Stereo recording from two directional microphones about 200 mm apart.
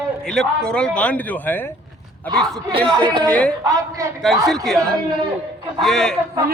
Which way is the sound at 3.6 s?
15° right (ahead or behind).